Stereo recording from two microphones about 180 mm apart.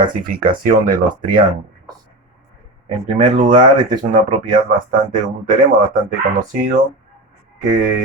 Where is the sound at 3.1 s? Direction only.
45° right (ahead or behind).